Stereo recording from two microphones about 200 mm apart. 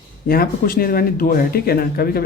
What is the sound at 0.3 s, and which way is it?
Speech, 45° left (ahead or behind).